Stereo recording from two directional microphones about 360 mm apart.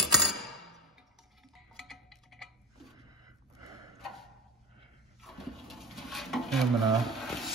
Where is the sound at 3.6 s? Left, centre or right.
Centre.